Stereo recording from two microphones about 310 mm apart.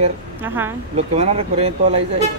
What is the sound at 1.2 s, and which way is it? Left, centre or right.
Speech, centre.